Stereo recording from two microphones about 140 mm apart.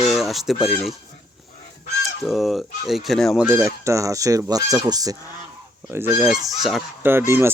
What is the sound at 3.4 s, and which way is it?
Speech, 20° right (ahead or behind).